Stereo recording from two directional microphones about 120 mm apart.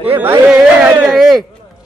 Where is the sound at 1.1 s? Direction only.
Centre (ahead or behind).